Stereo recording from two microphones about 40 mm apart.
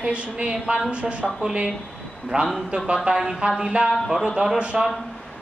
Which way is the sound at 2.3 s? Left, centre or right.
Right.